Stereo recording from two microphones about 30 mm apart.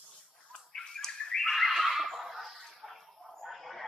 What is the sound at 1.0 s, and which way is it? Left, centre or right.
Bird, centre.